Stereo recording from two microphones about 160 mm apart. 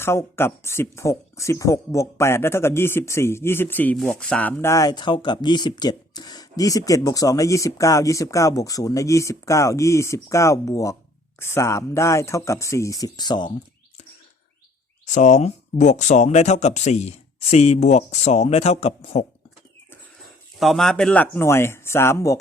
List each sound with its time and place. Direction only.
0.0 s speech: 15° left (ahead or behind)
15.0 s speech: 50° left (ahead or behind)
20.6 s speech: centre (ahead or behind); by 22.4 s 20° left (ahead or behind)